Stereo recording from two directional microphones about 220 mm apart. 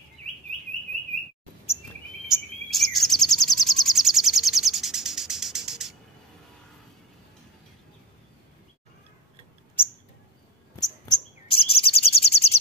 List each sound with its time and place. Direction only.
2.2 s bird vocalization: centre (ahead or behind)
10.8 s chirp: 20° left (ahead or behind)